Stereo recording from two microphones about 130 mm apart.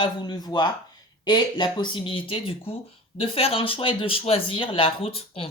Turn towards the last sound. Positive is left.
turn(degrees=45)  # may be behind; listen again after turning